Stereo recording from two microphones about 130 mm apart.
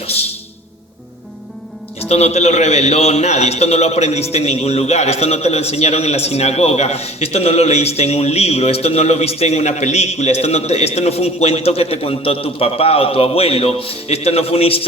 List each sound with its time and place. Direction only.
0.0 s music: 50° left (ahead or behind)
2.0 s a man's voice: 55° left (ahead or behind)